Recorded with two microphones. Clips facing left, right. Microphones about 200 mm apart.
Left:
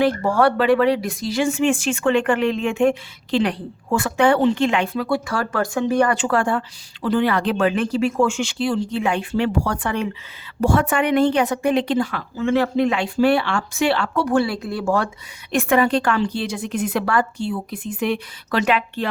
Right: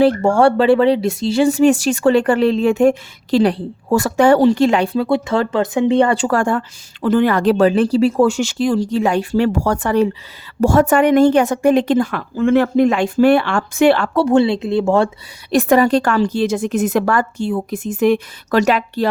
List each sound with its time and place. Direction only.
0.0 s speech: 30° right (ahead or behind)
6.2 s a woman's voice: 45° right (ahead or behind)
14.1 s a woman's voice: 30° right (ahead or behind)